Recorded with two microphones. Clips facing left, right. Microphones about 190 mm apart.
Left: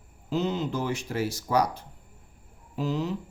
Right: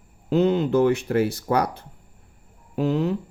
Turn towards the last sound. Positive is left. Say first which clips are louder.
# right 6 dB
turn(degrees=-60)  # may be behind; listen again after turning